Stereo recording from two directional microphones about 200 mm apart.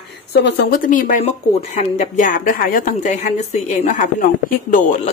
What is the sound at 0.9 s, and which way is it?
A woman's voice, 40° left (ahead or behind).